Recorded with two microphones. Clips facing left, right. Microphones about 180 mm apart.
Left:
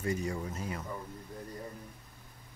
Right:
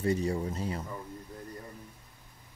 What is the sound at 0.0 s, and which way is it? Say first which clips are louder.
Speech: right 5 dB; 35° right (ahead or behind).